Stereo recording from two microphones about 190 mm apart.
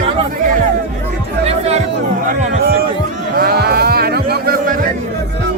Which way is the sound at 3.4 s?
55° right (ahead or behind).